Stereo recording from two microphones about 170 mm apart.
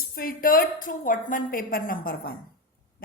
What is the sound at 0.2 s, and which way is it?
A woman's voice, 55° left (ahead or behind).